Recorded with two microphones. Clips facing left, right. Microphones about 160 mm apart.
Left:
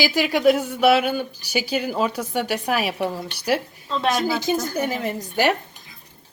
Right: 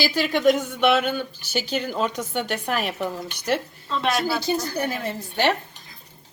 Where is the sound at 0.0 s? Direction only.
15° left (ahead or behind).